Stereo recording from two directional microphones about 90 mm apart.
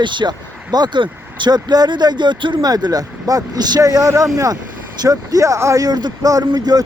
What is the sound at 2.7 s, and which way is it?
A man's voice, 50° right (ahead or behind).